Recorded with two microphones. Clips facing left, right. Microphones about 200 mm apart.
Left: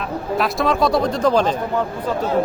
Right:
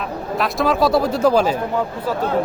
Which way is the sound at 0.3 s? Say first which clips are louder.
Right 1 dB; centre (ahead or behind).